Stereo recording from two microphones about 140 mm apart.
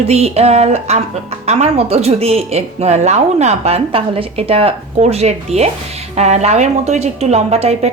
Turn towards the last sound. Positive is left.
turn(degrees=-50)  # may be behind; listen again after turning